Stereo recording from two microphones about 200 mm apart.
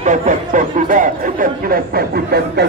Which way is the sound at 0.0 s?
40° right (ahead or behind).